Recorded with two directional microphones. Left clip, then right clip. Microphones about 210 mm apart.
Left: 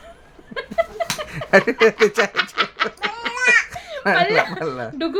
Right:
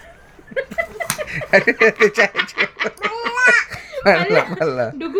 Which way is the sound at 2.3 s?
15° left (ahead or behind).